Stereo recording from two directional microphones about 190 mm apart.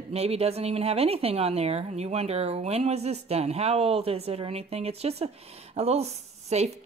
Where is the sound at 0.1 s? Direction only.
30° right (ahead or behind).